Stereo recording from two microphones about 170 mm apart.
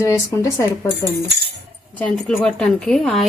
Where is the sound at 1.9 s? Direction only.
5° left (ahead or behind).